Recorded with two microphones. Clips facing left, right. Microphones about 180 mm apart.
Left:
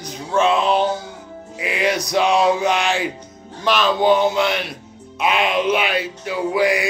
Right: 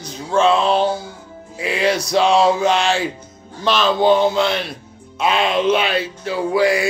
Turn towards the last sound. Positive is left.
turn(degrees=15)  # may be behind; listen again after turning